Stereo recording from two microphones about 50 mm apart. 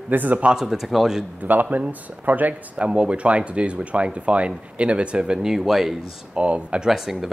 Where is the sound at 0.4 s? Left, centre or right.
Centre.